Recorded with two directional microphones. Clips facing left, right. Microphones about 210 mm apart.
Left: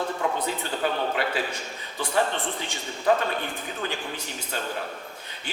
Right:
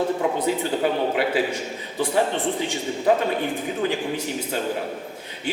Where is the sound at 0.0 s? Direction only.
15° right (ahead or behind).